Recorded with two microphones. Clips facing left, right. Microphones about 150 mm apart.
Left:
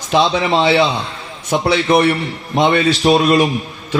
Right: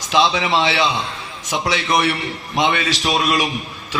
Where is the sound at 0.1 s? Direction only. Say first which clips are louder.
Left 3 dB; 40° left (ahead or behind).